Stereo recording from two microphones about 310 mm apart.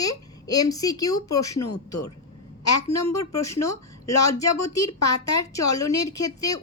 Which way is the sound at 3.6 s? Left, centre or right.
Centre.